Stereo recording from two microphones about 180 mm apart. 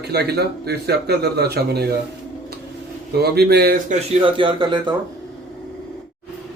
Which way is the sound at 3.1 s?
60° right (ahead or behind).